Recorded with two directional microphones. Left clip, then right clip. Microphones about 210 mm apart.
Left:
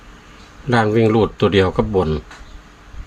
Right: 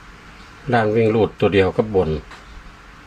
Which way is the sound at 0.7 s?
30° left (ahead or behind).